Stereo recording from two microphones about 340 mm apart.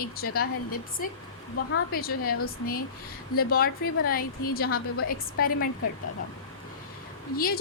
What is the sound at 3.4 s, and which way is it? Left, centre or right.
A woman's voice, left.